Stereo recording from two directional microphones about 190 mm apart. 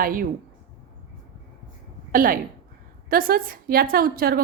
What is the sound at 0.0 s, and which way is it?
Speech, 45° right (ahead or behind).